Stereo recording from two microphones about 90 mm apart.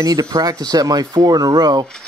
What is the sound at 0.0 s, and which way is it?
Speech, 45° right (ahead or behind).